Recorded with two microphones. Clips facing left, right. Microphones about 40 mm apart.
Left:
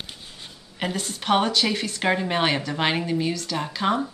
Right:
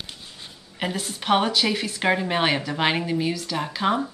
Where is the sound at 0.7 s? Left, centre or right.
Centre.